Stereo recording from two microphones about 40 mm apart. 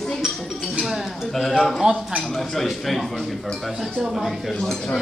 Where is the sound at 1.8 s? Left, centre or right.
Right.